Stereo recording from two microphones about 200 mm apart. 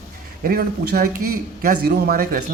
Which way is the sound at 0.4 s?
50° right (ahead or behind).